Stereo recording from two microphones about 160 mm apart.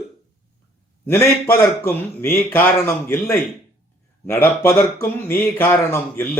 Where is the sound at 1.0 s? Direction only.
15° left (ahead or behind).